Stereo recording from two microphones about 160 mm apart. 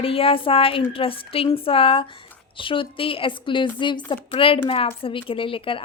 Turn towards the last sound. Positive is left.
turn(degrees=35)  # may be behind; listen again after turning